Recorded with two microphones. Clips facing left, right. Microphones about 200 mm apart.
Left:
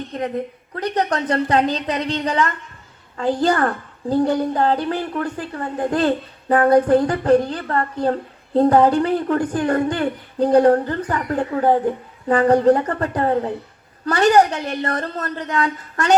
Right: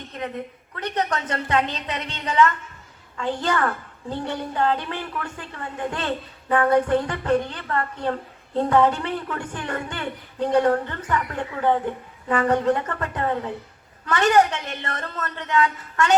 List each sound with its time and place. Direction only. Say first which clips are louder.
0.1 s a woman's voice: left 6 dB; 35° left (ahead or behind)